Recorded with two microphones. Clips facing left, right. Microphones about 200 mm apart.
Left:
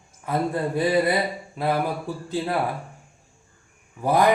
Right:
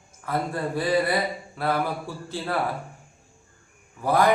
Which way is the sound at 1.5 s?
15° left (ahead or behind).